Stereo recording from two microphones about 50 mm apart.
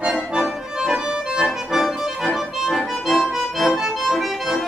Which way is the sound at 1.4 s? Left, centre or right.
Centre.